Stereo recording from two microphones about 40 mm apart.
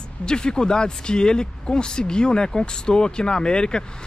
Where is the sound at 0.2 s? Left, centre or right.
Left.